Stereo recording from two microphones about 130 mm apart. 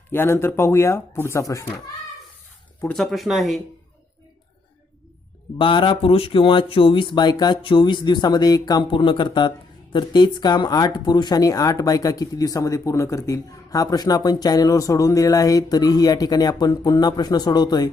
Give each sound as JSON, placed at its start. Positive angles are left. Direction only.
{"t": 0.1, "sound": "speech", "side_deg": 20}
{"t": 2.8, "sound": "speech", "side_deg": 5}
{"t": 5.5, "sound": "speech", "side_deg": 40}